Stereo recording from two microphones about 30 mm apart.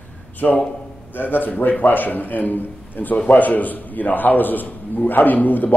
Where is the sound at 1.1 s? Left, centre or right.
Left.